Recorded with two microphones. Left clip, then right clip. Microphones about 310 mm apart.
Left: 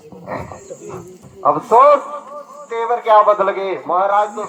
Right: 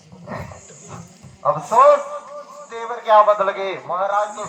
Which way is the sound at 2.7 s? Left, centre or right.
Left.